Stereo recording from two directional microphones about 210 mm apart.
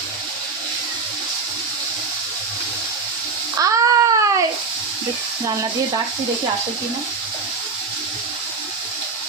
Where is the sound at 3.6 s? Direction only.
15° right (ahead or behind).